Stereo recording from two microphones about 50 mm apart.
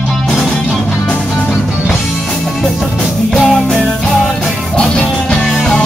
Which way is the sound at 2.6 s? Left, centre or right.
Centre.